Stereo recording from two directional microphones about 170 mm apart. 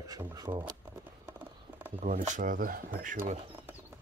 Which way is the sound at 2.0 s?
45° right (ahead or behind).